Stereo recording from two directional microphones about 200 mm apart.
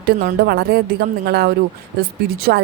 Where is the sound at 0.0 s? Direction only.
50° right (ahead or behind).